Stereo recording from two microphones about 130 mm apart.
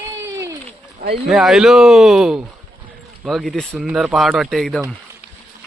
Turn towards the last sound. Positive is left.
turn(degrees=0)  # may be behind; listen again after turning